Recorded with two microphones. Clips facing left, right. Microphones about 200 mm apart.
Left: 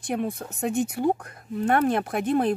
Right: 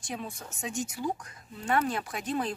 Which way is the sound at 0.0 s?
60° left (ahead or behind).